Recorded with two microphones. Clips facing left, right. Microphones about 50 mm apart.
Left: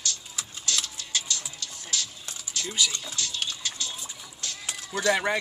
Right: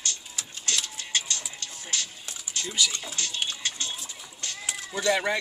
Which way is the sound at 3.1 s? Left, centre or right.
Right.